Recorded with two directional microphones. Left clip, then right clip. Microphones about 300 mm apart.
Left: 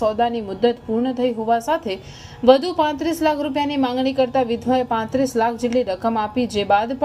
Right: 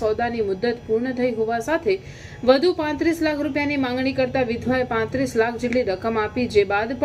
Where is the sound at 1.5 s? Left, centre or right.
Centre.